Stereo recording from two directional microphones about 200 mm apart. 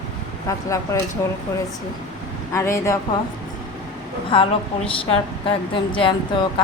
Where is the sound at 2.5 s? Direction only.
15° left (ahead or behind).